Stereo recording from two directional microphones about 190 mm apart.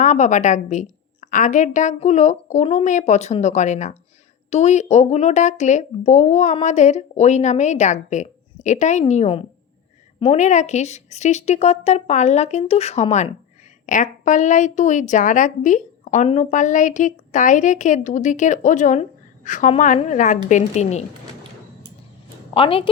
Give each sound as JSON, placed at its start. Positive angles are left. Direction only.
{"t": 0.0, "sound": "a woman's voice", "side_deg": 40}
{"t": 22.5, "sound": "a woman's voice", "side_deg": 30}